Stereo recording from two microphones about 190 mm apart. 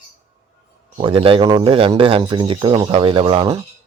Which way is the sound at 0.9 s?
25° right (ahead or behind).